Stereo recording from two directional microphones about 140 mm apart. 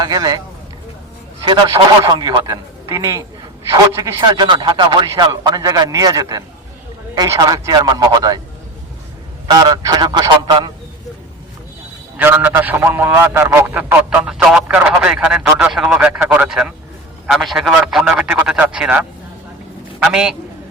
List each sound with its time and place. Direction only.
0.0 s a man's voice: 30° right (ahead or behind)
2.0 s a man's voice: 30° right (ahead or behind)
9.5 s a man's voice: 25° right (ahead or behind)
12.1 s a man's voice: 10° right (ahead or behind)